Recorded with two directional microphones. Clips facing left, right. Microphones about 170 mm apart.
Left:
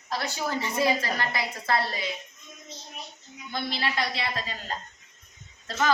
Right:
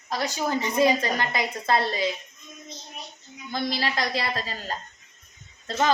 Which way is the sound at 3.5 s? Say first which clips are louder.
Right 3 dB; 40° right (ahead or behind).